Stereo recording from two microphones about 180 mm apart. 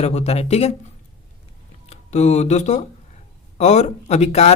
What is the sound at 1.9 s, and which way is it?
A woman's voice, 40° left (ahead or behind).